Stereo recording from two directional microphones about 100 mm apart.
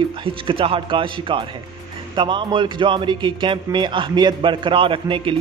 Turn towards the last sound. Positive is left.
turn(degrees=-55)  # may be behind; listen again after turning